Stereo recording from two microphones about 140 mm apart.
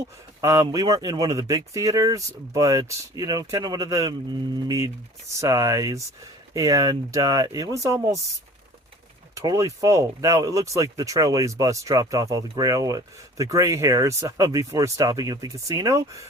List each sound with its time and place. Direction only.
0.4 s speech: 20° right (ahead or behind)
9.3 s speech: 25° right (ahead or behind)